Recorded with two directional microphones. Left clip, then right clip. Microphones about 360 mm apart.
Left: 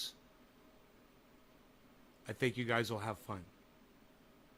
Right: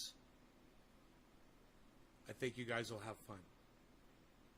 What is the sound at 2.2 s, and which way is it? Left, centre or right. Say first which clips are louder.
Speech: left 8 dB; left.